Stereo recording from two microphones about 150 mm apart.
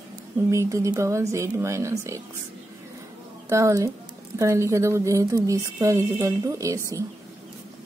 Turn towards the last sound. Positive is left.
turn(degrees=-20)  # may be behind; listen again after turning